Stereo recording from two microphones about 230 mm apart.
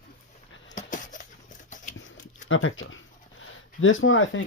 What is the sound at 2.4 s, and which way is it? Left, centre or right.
Speech, left.